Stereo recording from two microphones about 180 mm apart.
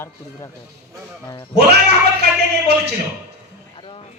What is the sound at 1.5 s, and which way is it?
Speech, 65° right (ahead or behind).